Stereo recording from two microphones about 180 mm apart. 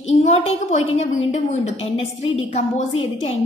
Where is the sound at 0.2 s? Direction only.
40° left (ahead or behind).